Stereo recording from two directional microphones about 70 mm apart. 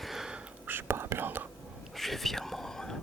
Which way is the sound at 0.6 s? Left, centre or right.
Right.